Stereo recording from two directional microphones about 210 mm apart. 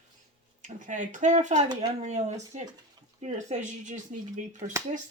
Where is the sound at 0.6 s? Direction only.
35° right (ahead or behind).